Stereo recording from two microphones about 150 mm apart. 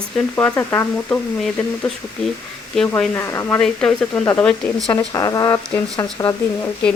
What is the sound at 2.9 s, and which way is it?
Speech, 15° left (ahead or behind).